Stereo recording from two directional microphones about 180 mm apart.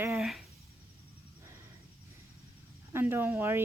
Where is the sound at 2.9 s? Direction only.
10° right (ahead or behind).